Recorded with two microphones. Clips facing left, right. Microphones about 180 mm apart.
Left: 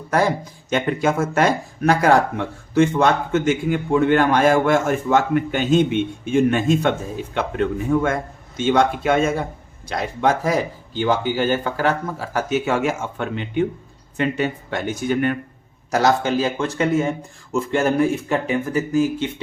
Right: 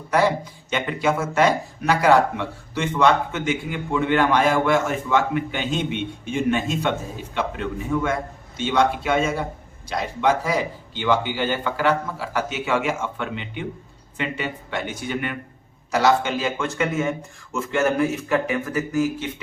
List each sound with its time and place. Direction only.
0.1 s speech: 45° left (ahead or behind); by 19.3 s 25° left (ahead or behind)